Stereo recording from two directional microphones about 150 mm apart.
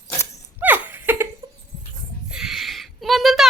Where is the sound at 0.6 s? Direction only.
10° right (ahead or behind).